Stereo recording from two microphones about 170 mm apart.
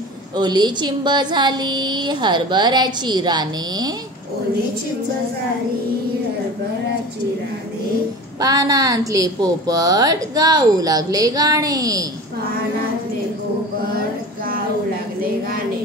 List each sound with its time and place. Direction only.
0.4 s a woman's voice: 25° right (ahead or behind)
8.4 s a woman's voice: 20° right (ahead or behind)
13.9 s a sound: 60° right (ahead or behind)